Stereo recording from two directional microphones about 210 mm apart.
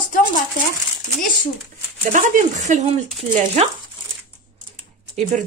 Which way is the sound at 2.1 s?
35° right (ahead or behind).